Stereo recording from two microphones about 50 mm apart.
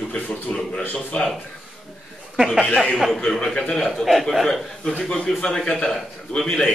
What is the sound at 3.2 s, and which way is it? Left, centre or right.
A man's voice, centre.